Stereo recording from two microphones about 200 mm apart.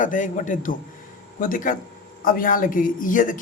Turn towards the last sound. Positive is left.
turn(degrees=40)  # may be behind; listen again after turning